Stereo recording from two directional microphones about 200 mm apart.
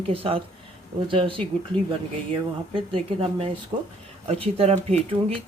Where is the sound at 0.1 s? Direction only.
30° right (ahead or behind).